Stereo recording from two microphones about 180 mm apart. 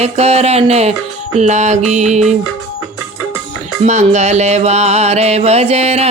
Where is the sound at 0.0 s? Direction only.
35° right (ahead or behind).